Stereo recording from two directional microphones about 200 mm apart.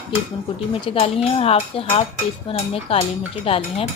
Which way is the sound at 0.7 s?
30° left (ahead or behind).